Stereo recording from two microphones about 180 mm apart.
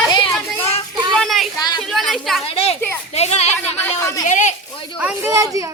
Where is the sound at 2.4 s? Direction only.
30° left (ahead or behind).